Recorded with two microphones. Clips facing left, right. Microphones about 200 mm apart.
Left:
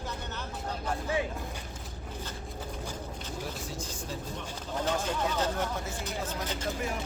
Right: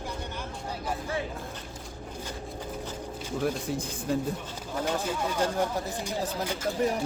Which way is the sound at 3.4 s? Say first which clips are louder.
Right 12 dB; 60° right (ahead or behind).